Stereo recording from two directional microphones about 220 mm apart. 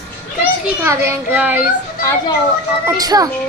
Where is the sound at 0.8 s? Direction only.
10° right (ahead or behind).